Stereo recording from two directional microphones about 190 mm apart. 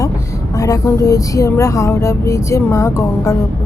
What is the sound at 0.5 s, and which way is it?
Speech, 20° left (ahead or behind).